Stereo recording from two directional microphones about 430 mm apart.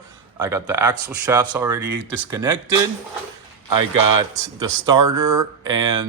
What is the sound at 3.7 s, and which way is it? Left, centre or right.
Speech, right.